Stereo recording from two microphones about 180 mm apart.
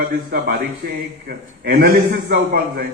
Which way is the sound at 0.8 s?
55° right (ahead or behind).